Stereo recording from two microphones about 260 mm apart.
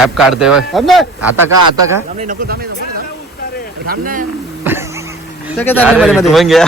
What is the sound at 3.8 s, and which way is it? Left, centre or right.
Speech, right.